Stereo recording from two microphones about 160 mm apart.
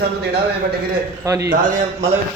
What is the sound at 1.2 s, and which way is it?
Speech, 20° right (ahead or behind).